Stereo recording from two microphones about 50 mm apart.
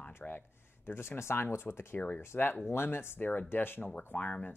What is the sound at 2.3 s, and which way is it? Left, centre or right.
Speech, left.